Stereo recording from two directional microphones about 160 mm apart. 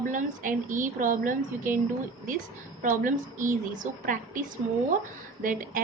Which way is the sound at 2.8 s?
55° right (ahead or behind).